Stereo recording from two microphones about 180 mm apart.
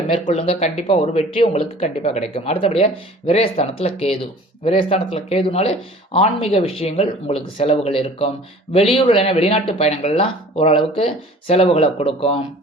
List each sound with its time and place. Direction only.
0.1 s speech: 30° left (ahead or behind)